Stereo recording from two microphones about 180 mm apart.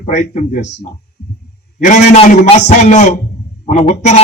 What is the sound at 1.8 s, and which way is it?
A man's voice, 40° left (ahead or behind).